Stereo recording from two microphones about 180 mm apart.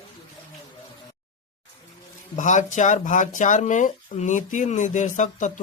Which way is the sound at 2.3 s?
45° left (ahead or behind).